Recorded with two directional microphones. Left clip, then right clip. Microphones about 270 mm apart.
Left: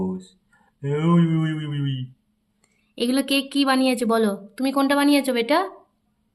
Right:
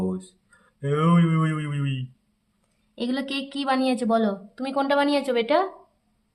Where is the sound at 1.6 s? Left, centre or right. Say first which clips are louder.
Left 1 dB; right.